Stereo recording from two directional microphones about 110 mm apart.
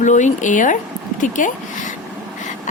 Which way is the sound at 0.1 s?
90° left.